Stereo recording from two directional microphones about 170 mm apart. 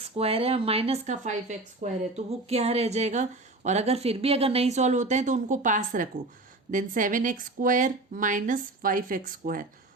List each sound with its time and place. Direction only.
0.0 s speech: 35° right (ahead or behind); by 9.6 s 55° right (ahead or behind)